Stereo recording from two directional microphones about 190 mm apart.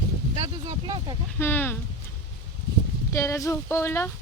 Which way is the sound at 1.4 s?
10° left (ahead or behind).